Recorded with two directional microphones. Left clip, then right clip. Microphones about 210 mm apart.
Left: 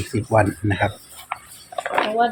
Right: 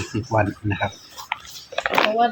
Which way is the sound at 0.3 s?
45° left (ahead or behind).